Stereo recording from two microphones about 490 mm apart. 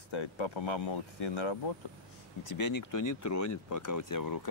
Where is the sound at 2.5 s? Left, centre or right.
Left.